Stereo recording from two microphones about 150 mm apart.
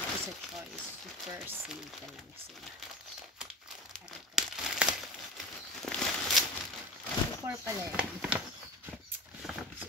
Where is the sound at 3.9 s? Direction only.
Centre (ahead or behind).